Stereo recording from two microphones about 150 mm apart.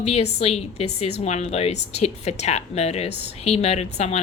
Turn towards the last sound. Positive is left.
turn(degrees=45)  # may be behind; listen again after turning